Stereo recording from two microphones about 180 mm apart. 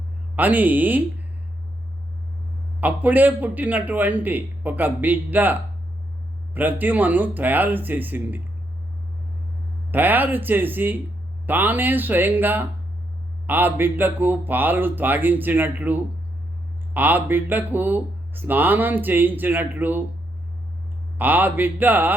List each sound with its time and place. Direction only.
0.3 s speech: 10° right (ahead or behind)
2.8 s speech: 10° right (ahead or behind)
9.9 s speech: 10° right (ahead or behind)
21.2 s speech: 10° right (ahead or behind)